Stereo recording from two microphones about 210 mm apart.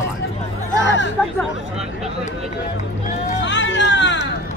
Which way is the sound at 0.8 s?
60° left (ahead or behind).